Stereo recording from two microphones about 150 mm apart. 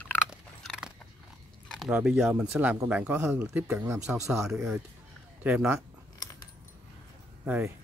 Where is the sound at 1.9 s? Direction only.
10° right (ahead or behind).